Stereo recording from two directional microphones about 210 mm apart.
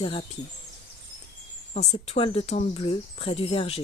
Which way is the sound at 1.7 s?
30° left (ahead or behind).